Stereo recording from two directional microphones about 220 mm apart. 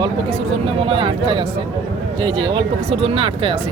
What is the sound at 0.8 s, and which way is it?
Speech, 25° right (ahead or behind).